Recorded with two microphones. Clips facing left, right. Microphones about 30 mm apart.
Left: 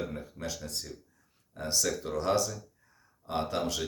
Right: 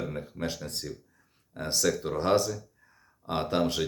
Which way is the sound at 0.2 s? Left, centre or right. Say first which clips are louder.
Right 4 dB; right.